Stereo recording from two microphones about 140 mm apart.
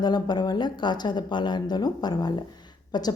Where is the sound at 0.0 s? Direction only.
30° left (ahead or behind).